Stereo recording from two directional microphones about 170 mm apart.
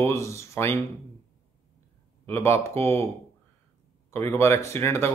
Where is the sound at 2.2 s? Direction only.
15° left (ahead or behind).